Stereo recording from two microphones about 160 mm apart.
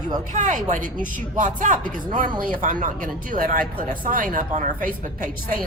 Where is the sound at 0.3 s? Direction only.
50° right (ahead or behind).